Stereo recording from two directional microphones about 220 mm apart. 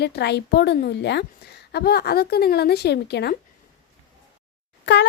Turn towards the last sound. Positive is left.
turn(degrees=55)  # may be behind; listen again after turning